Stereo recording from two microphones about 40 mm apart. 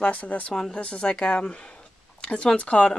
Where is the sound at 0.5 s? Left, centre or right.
Centre.